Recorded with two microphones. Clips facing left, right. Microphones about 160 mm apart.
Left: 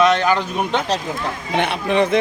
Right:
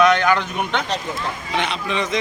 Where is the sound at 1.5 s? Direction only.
55° left (ahead or behind).